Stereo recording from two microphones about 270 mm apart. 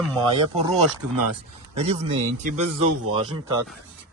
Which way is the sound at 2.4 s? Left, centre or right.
Right.